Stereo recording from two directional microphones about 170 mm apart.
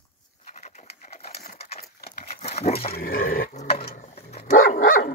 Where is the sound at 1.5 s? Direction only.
40° left (ahead or behind).